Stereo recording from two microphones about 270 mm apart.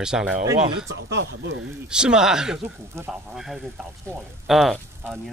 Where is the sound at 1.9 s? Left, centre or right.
Centre.